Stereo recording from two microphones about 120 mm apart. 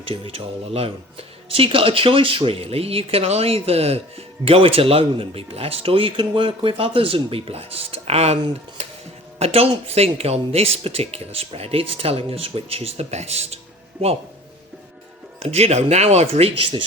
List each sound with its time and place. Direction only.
0.0 s speech: 50° right (ahead or behind)
9.4 s speech: 55° right (ahead or behind)
15.4 s speech: 60° right (ahead or behind)